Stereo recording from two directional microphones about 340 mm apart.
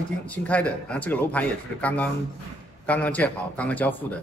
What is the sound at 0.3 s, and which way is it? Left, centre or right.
A man's voice, centre.